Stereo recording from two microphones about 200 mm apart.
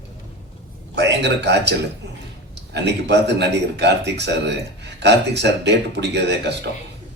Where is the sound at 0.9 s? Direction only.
60° right (ahead or behind).